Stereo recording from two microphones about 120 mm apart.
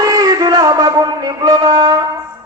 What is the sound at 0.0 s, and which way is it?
Music, 30° right (ahead or behind).